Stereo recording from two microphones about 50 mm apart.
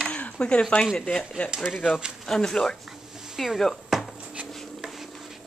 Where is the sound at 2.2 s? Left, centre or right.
Centre.